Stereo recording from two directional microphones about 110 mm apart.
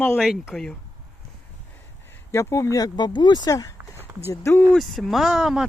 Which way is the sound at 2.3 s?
25° left (ahead or behind).